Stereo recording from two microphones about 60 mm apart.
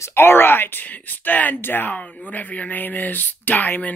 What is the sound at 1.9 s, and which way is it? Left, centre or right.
Speech, left.